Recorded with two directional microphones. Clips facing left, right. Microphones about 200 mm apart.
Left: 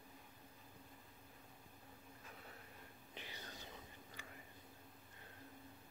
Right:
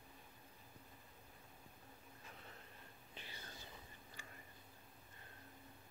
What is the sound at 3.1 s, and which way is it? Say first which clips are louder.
Whispering: left 2 dB; 15° left (ahead or behind).